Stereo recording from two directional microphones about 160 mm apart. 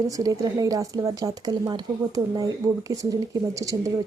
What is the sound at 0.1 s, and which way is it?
Speech, 20° right (ahead or behind).